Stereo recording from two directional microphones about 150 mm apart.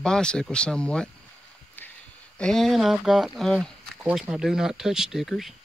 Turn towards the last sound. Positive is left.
turn(degrees=0)  # may be behind; listen again after turning